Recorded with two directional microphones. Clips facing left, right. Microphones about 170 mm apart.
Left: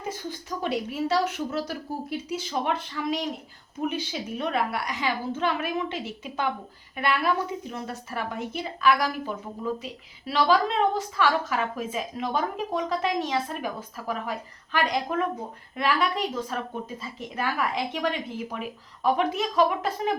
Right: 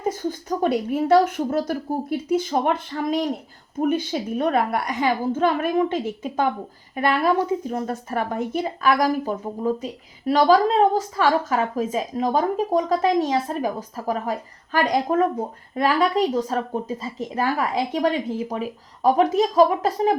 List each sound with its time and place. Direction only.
0.0 s a woman's voice: 45° right (ahead or behind)